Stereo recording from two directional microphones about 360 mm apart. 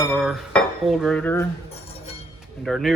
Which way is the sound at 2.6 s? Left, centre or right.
Centre.